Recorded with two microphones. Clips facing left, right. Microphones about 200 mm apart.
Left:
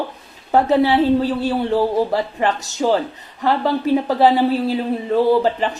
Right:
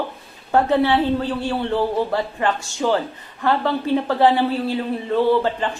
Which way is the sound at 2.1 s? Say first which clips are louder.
Left 2 dB; 20° left (ahead or behind).